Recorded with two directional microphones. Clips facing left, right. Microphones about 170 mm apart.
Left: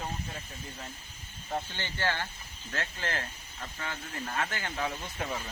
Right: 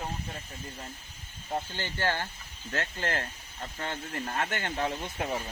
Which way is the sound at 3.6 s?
35° right (ahead or behind).